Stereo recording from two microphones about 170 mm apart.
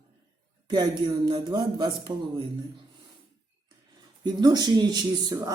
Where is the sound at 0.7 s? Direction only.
25° right (ahead or behind).